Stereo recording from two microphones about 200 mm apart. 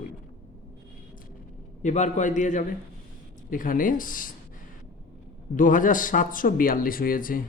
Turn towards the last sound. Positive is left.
turn(degrees=45)  # may be behind; listen again after turning